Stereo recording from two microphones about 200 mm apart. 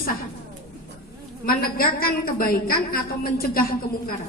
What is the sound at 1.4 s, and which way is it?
A woman's voice, 45° left (ahead or behind).